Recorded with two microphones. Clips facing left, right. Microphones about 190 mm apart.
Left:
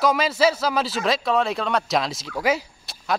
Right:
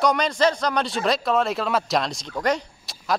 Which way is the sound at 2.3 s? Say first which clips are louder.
Left 1 dB; 5° left (ahead or behind).